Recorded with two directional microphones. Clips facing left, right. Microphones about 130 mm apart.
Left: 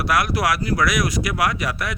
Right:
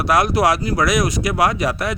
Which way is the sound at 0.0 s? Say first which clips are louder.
Right 5 dB; 25° right (ahead or behind).